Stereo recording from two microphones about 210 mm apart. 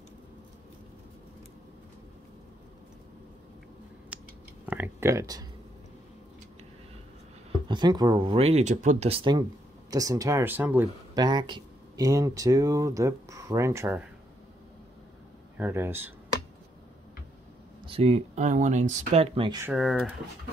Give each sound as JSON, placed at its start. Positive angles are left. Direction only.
{"t": 4.1, "sound": "a sound", "side_deg": -5}
{"t": 7.6, "sound": "speech", "side_deg": -20}
{"t": 11.1, "sound": "speech", "side_deg": -20}
{"t": 15.5, "sound": "speech", "side_deg": -10}
{"t": 17.8, "sound": "speech", "side_deg": -30}
{"t": 19.6, "sound": "speech", "side_deg": 0}